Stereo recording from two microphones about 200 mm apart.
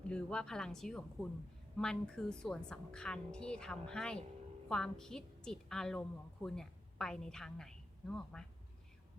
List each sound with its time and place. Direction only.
0.1 s a woman's voice: 5° left (ahead or behind)